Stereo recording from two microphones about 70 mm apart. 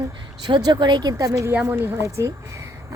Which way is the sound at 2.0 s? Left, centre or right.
Right.